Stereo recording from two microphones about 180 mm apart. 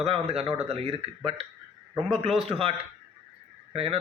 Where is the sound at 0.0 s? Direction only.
35° right (ahead or behind).